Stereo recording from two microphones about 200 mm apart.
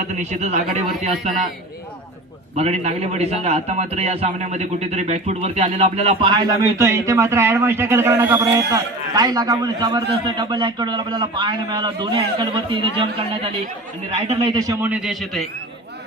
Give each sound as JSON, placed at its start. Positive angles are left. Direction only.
{"t": 0.2, "sound": "a man's voice", "side_deg": -35}
{"t": 2.6, "sound": "a man's voice", "side_deg": -35}
{"t": 14.8, "sound": "speech", "side_deg": -10}